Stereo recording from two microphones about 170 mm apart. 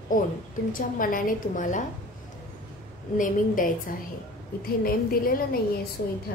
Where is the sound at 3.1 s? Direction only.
50° left (ahead or behind).